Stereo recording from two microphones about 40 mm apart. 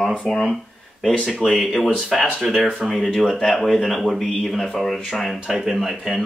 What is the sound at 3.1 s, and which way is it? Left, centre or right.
Speech, centre.